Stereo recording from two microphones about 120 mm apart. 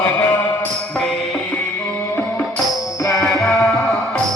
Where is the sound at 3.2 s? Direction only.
Centre (ahead or behind).